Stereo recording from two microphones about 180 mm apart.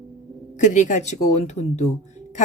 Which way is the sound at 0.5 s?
45° left (ahead or behind).